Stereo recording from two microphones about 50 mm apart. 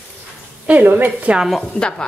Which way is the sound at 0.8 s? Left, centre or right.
Right.